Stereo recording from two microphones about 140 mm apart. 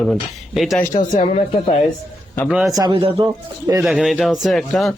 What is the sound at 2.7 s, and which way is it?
Speech, 30° right (ahead or behind).